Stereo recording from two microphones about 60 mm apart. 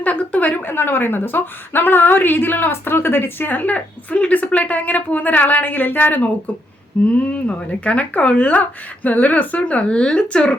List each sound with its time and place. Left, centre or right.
0.0 s a woman's voice: left